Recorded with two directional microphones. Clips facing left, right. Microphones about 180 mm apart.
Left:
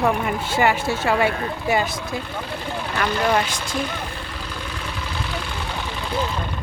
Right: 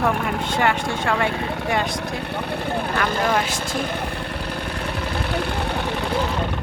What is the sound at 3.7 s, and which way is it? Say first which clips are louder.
Vehicle: even; 60° right (ahead or behind).